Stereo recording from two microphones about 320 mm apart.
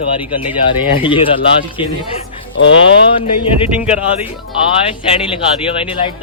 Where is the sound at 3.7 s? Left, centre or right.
Centre.